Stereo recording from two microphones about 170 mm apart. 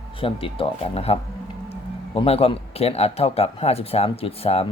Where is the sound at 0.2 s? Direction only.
30° left (ahead or behind).